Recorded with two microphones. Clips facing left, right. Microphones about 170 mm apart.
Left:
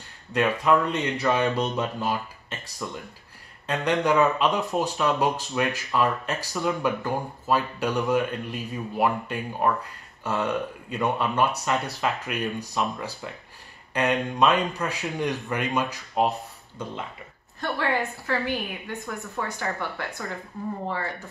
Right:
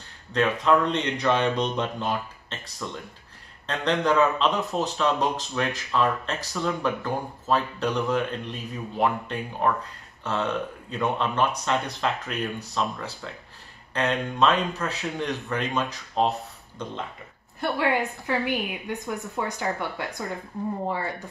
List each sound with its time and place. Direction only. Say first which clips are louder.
0.3 s speech: even; 10° left (ahead or behind)
13.9 s speech: left 1 dB; 10° left (ahead or behind)
17.6 s a woman's voice: right 2 dB; 15° right (ahead or behind)